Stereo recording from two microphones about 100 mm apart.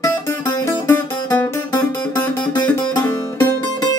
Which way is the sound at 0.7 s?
25° left (ahead or behind).